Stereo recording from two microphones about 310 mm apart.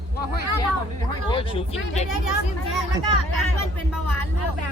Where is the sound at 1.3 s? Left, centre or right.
Centre.